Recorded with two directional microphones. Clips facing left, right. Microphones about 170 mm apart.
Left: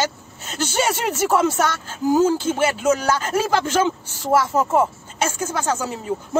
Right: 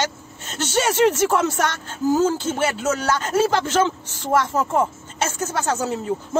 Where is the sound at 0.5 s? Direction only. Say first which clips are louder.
Right 3 dB; 10° left (ahead or behind).